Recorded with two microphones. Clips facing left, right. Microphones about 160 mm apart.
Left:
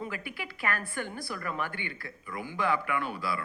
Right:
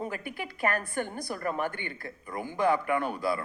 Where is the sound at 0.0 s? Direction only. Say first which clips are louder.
Right 3 dB; 45° right (ahead or behind).